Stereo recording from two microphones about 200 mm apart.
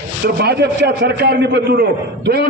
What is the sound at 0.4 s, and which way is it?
A man's voice, 55° right (ahead or behind).